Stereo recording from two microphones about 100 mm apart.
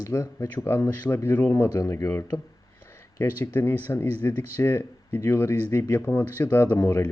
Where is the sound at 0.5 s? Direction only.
20° left (ahead or behind).